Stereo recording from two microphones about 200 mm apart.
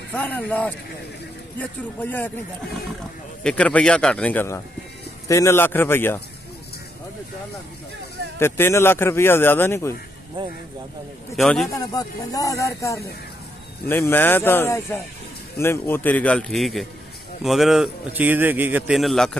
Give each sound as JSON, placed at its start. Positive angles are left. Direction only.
{"t": 0.1, "sound": "a man's voice", "side_deg": 10}
{"t": 8.4, "sound": "speech", "side_deg": 10}
{"t": 11.3, "sound": "a man's voice", "side_deg": 0}
{"t": 11.7, "sound": "a man's voice", "side_deg": 20}